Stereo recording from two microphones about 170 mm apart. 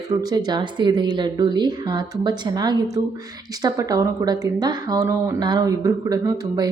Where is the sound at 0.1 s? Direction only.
20° right (ahead or behind).